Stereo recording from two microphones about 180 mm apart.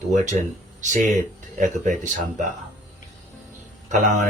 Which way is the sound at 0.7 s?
45° right (ahead or behind).